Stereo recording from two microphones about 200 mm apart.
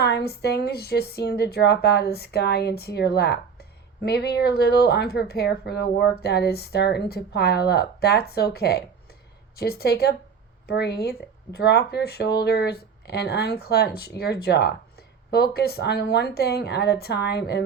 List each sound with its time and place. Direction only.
0.0 s speech: 55° left (ahead or behind)